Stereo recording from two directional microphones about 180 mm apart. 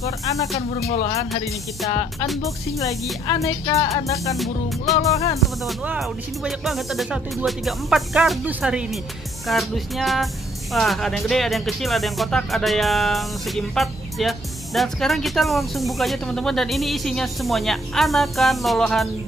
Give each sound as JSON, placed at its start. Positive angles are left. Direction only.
{"t": 0.9, "sound": "speech", "side_deg": 35}
{"t": 2.4, "sound": "speech", "side_deg": 20}
{"t": 4.9, "sound": "speech", "side_deg": 0}